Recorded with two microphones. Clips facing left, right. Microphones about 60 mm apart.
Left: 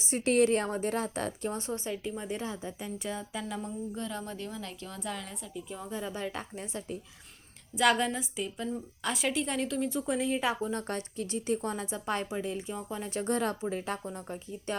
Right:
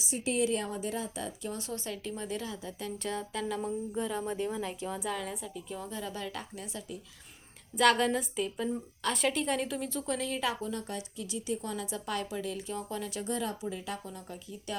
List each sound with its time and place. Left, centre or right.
0.0 s a woman's voice: left
1.5 s speech: left
2.8 s speech: centre
3.6 s speech: centre
5.0 s a woman's voice: centre
5.9 s speech: left
7.8 s a woman's voice: centre
9.9 s speech: centre
10.8 s a woman's voice: left
13.0 s a woman's voice: left